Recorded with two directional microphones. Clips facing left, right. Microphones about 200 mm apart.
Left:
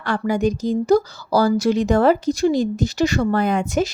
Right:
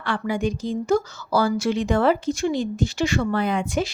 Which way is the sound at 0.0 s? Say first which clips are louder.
Left 4 dB; 40° left (ahead or behind).